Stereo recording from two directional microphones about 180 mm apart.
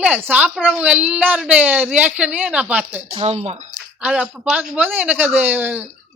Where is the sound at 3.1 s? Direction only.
35° right (ahead or behind).